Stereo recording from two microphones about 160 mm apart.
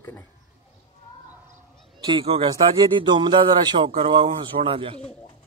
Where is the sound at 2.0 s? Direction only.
30° right (ahead or behind).